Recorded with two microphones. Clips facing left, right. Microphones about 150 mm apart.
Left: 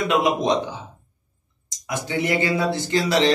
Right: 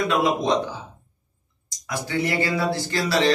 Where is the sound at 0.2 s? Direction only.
20° left (ahead or behind).